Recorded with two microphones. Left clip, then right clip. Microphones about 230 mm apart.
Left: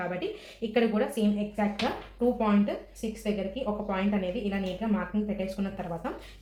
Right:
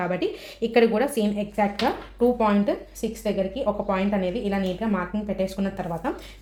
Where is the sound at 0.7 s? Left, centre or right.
Right.